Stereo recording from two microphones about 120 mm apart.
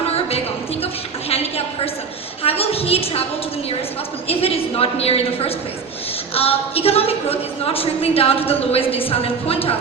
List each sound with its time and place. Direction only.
0.3 s a sound: 55° left (ahead or behind)
2.4 s a woman's voice: 55° left (ahead or behind)
4.3 s a woman's voice: 55° left (ahead or behind)